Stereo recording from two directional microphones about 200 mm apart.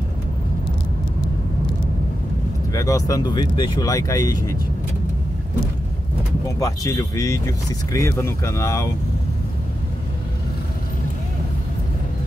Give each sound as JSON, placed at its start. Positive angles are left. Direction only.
{"t": 2.7, "sound": "speech", "side_deg": 15}
{"t": 6.6, "sound": "speech", "side_deg": 15}